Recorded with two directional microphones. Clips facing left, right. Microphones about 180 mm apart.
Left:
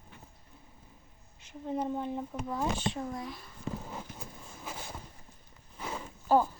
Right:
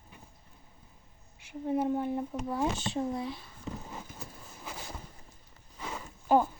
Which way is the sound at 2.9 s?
30° right (ahead or behind).